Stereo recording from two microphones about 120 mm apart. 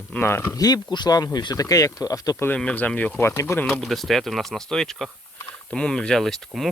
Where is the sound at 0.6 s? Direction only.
35° left (ahead or behind).